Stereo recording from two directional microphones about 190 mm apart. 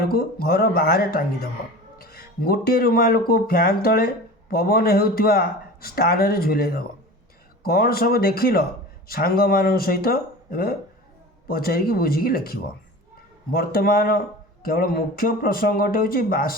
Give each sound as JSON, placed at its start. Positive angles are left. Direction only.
{"t": 0.1, "sound": "speech", "side_deg": 50}
{"t": 13.6, "sound": "speech", "side_deg": 50}